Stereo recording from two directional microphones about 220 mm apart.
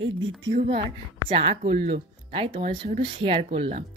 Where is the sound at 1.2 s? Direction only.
25° right (ahead or behind).